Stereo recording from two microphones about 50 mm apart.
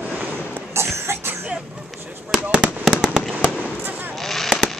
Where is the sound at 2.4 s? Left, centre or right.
Right.